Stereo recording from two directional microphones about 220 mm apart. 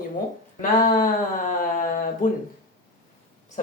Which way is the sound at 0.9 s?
35° left (ahead or behind).